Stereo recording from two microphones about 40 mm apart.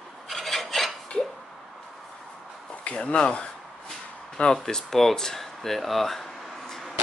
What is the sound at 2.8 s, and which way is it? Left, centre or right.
Speech, left.